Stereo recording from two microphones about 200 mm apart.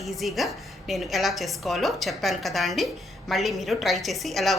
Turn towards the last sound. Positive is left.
turn(degrees=0)  # may be behind; listen again after turning